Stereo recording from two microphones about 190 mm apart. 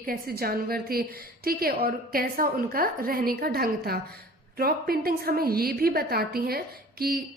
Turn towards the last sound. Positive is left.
turn(degrees=-50)  # may be behind; listen again after turning